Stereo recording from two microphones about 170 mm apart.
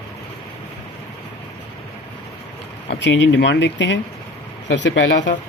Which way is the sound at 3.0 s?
90° left.